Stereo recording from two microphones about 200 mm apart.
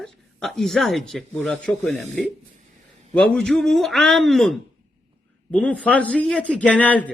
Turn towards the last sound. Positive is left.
turn(degrees=5)  # may be behind; listen again after turning